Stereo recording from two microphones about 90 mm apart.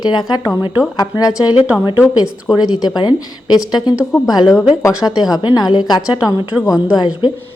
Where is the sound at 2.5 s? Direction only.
Centre (ahead or behind).